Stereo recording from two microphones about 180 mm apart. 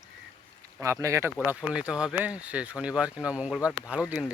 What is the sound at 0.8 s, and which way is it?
Speech, 15° right (ahead or behind).